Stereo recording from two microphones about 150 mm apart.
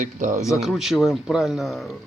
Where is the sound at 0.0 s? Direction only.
55° right (ahead or behind).